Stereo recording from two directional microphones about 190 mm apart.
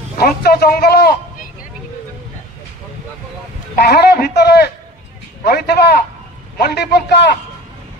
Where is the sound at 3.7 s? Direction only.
60° left (ahead or behind).